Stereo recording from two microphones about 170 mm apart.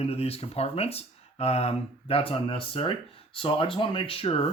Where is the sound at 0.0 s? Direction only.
35° left (ahead or behind).